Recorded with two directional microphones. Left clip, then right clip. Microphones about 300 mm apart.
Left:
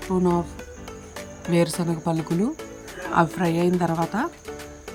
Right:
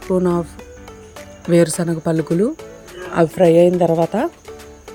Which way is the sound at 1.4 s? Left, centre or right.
Centre.